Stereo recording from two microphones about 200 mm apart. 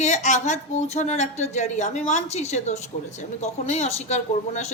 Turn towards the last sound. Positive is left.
turn(degrees=35)  # may be behind; listen again after turning